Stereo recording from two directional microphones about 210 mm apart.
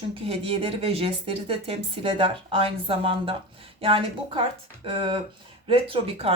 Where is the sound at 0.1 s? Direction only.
25° right (ahead or behind).